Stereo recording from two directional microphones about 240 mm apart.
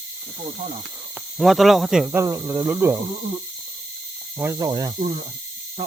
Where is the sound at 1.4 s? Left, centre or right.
Centre.